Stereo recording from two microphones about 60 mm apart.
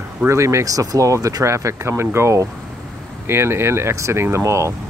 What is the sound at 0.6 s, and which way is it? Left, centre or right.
Speech, right.